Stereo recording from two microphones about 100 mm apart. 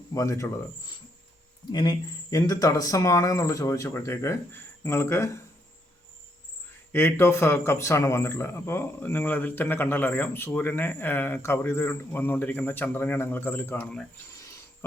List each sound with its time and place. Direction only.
0.1 s speech: 35° left (ahead or behind)
1.7 s speech: 45° left (ahead or behind); by 5.4 s 30° left (ahead or behind)
6.9 s a man's voice: 25° left (ahead or behind)